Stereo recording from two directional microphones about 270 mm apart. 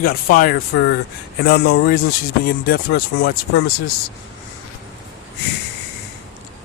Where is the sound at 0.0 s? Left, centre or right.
Left.